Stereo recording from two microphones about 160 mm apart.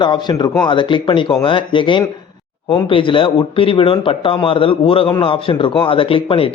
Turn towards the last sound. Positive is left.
turn(degrees=35)  # may be behind; listen again after turning